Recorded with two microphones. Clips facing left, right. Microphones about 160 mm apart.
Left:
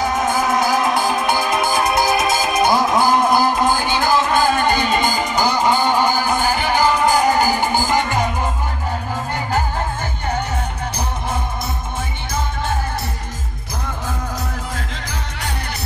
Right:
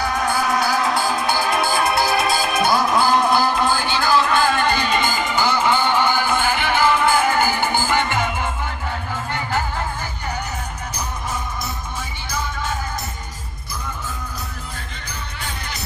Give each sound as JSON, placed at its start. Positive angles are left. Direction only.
{"t": 0.0, "sound": "music", "side_deg": 20}
{"t": 4.9, "sound": "music", "side_deg": 40}